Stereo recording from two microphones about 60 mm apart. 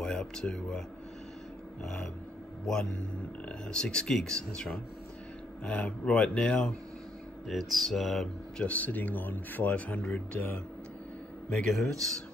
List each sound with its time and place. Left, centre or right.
0.0 s speech: centre
2.6 s speech: centre
5.6 s speech: left
7.4 s speech: centre
8.5 s speech: left
11.5 s speech: centre